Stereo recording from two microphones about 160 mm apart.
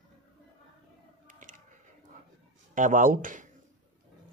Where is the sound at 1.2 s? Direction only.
55° right (ahead or behind).